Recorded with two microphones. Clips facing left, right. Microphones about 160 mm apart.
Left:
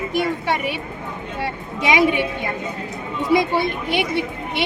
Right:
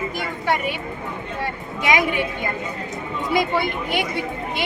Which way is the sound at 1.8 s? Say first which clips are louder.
Left 3 dB; 25° left (ahead or behind).